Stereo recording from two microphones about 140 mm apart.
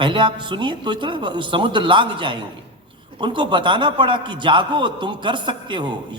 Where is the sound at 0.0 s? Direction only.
35° right (ahead or behind).